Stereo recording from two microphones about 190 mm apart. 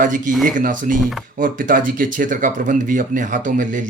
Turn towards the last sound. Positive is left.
turn(degrees=-45)  # may be behind; listen again after turning